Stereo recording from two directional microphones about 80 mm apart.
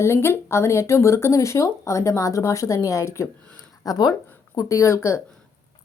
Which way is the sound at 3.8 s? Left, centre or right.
Left.